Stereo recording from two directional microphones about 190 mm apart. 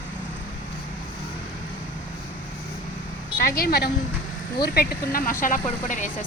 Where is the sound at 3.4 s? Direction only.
55° left (ahead or behind).